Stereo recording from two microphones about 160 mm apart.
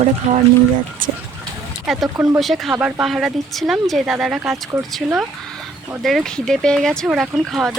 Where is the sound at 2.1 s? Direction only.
15° right (ahead or behind).